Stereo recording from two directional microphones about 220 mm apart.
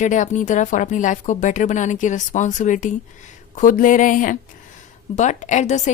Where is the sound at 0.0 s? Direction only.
35° left (ahead or behind).